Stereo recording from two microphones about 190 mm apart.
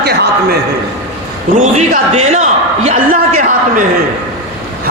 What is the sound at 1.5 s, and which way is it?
A man's voice, 40° right (ahead or behind).